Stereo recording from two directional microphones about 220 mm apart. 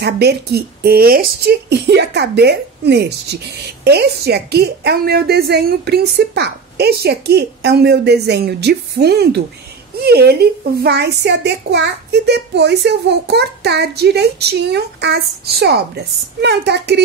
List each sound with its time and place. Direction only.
0.0 s a woman's voice: 50° right (ahead or behind)